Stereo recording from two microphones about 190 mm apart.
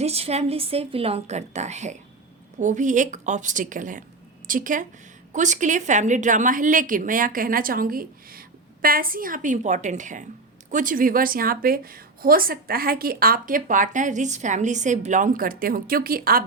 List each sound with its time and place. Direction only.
0.0 s a woman's voice: 35° right (ahead or behind); by 16.4 s 50° right (ahead or behind)